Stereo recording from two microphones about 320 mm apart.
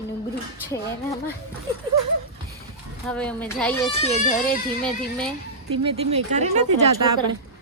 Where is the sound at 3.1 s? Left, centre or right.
Centre; by 4.4 s left.